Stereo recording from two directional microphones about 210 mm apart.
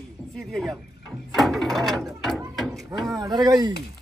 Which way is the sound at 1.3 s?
Centre (ahead or behind).